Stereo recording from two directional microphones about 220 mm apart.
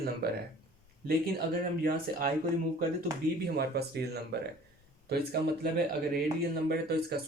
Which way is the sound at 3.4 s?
45° right (ahead or behind).